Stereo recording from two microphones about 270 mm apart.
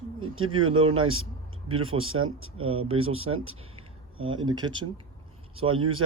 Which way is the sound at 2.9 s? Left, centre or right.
Right.